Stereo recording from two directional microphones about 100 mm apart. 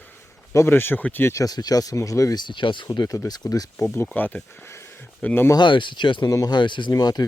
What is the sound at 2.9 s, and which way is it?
Speech, 40° left (ahead or behind).